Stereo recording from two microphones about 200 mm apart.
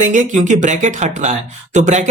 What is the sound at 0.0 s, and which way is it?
Speech, 40° right (ahead or behind).